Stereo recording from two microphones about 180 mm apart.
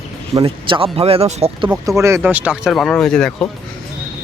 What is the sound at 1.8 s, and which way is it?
Speech, 15° right (ahead or behind).